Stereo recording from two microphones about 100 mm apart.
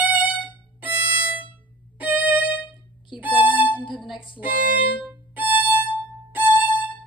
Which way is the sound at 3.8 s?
55° left (ahead or behind).